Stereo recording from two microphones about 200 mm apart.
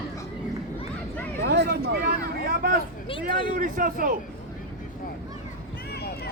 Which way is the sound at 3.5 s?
45° right (ahead or behind).